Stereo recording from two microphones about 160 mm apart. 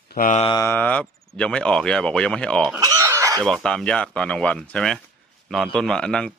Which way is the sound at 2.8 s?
20° right (ahead or behind).